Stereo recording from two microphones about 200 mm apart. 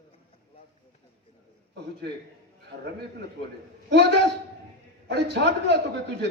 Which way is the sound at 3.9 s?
60° right (ahead or behind).